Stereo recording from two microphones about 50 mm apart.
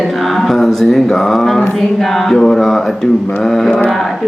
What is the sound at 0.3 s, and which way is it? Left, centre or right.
Music, centre.